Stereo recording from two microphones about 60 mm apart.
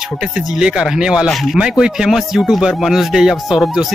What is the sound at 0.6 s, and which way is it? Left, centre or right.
Speech, centre.